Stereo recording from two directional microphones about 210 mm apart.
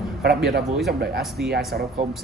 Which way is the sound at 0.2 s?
50° right (ahead or behind).